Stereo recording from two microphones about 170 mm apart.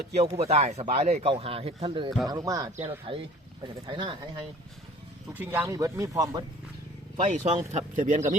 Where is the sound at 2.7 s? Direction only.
35° right (ahead or behind).